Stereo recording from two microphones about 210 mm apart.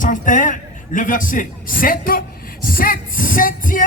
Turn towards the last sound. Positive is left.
turn(degrees=40)  # may be behind; listen again after turning